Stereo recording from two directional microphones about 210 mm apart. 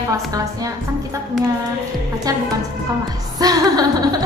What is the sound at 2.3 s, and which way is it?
Speech, 15° right (ahead or behind).